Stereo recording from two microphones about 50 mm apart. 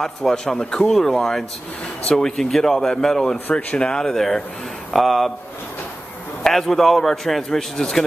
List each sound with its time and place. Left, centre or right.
0.0 s a man's voice: centre
6.4 s a man's voice: centre